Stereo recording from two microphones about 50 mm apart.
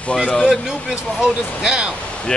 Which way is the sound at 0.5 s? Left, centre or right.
Centre.